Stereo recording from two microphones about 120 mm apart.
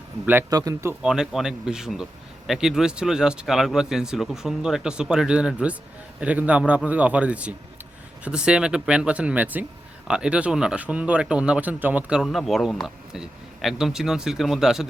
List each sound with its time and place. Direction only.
0.5 s speech: 30° right (ahead or behind)
1.0 s speech: 5° right (ahead or behind)